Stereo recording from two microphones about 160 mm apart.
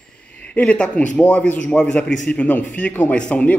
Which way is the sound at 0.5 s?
5° left (ahead or behind).